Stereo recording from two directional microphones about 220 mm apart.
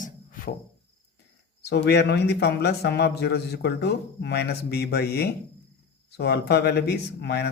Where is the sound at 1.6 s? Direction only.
50° left (ahead or behind).